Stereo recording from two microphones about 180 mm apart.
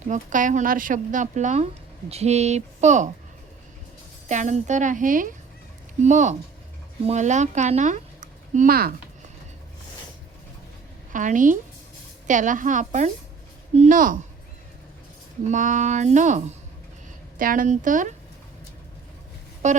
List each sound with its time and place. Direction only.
0.1 s speech: 45° right (ahead or behind)
4.3 s speech: 40° right (ahead or behind)
11.1 s speech: 45° right (ahead or behind)
15.4 s speech: 45° right (ahead or behind)
19.6 s speech: 40° right (ahead or behind)